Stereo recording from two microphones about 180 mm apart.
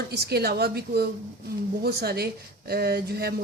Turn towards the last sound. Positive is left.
turn(degrees=-60)  # may be behind; listen again after turning